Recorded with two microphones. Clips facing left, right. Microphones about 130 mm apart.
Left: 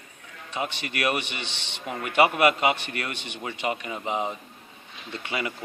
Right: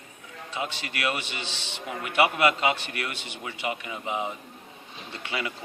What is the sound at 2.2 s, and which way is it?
A man's voice, 35° left (ahead or behind).